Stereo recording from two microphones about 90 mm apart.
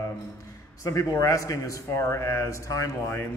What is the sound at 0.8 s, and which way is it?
A man's voice, 35° left (ahead or behind).